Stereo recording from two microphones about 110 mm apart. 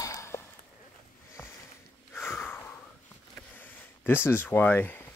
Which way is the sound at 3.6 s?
15° left (ahead or behind).